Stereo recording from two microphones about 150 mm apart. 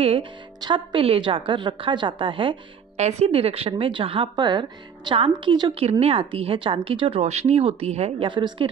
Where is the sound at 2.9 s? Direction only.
45° right (ahead or behind).